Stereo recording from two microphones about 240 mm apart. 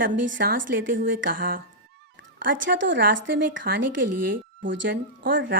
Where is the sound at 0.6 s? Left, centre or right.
Right.